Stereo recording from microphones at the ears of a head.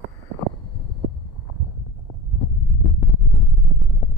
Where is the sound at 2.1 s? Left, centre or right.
Left.